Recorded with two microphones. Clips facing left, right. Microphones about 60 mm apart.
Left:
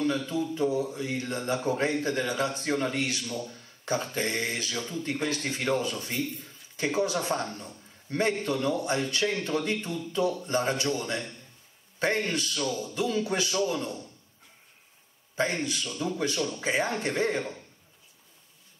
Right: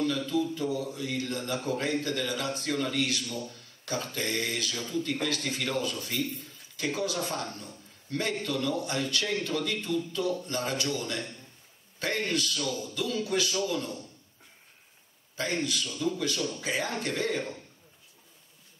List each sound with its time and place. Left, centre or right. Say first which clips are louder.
0.3 s speech: left 1 dB; left
15.3 s speech: left 2 dB; left